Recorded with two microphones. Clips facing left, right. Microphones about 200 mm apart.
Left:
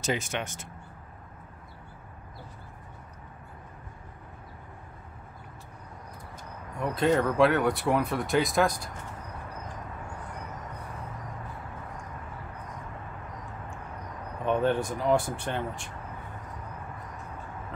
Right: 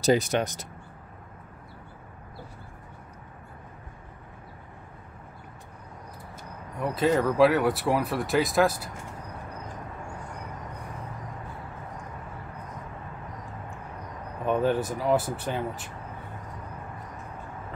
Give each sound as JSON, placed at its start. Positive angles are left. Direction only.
{"t": 0.0, "sound": "speech", "side_deg": -35}
{"t": 6.8, "sound": "speech", "side_deg": 0}
{"t": 14.4, "sound": "speech", "side_deg": -5}